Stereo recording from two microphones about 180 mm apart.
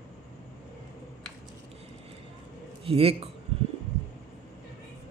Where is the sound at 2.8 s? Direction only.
30° right (ahead or behind).